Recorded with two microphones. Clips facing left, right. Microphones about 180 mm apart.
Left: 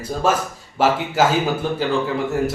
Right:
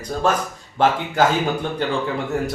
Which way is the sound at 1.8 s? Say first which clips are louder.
Left 2 dB; centre (ahead or behind).